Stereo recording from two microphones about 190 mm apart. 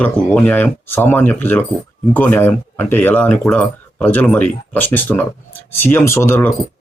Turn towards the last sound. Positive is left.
turn(degrees=10)  # may be behind; listen again after turning